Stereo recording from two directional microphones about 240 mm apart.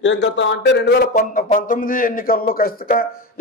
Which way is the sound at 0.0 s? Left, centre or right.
Left.